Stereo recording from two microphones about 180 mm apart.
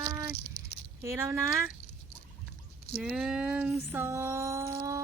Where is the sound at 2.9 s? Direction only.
5° right (ahead or behind).